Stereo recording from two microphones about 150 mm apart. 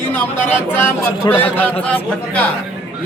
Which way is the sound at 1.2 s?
15° left (ahead or behind).